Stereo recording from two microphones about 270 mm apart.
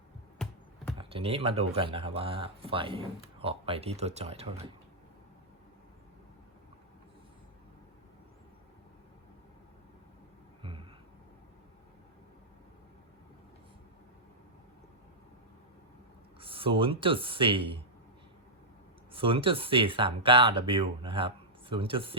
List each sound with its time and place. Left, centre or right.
0.9 s speech: right
10.6 s a sound: centre
16.4 s speech: centre
19.1 s speech: centre